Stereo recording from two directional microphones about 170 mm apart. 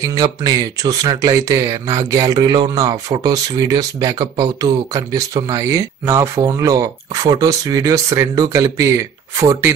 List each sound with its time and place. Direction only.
0.0 s speech: 20° right (ahead or behind)